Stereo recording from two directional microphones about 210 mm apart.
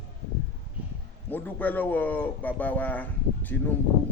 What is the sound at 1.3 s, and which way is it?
A man's voice, 10° left (ahead or behind).